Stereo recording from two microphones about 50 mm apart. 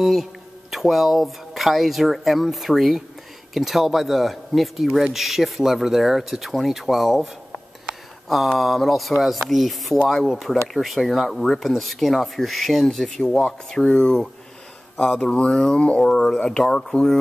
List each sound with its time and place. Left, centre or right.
0.0 s speech: centre
8.5 s speech: centre; by 16.0 s left
16.0 s speech: centre